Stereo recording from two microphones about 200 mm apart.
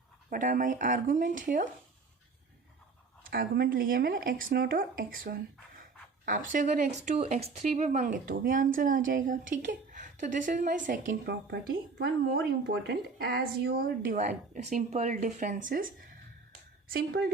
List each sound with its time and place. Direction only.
0.3 s speech: 40° right (ahead or behind)
3.2 s speech: 50° right (ahead or behind)
11.1 s a woman's voice: 60° right (ahead or behind); by 15.6 s 40° right (ahead or behind)
16.9 s speech: 50° right (ahead or behind)